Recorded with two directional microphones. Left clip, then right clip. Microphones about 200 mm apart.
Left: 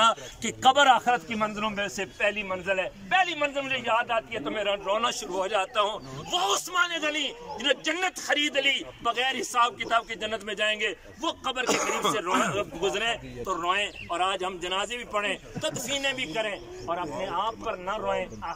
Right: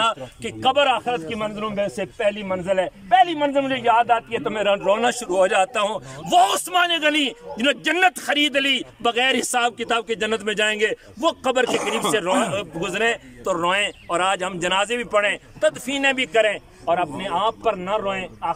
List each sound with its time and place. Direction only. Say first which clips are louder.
0.0 s a man's voice: right 1 dB; 5° right (ahead or behind); by 11.6 s 50° right (ahead or behind)
11.6 s speech: right 4 dB; 15° right (ahead or behind)
12.5 s a man's voice: right 4 dB; 45° right (ahead or behind)